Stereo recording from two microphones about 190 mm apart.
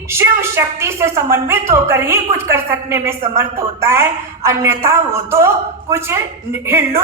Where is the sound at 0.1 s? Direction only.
15° right (ahead or behind).